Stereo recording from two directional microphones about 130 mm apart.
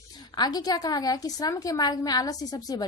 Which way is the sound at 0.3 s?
30° left (ahead or behind).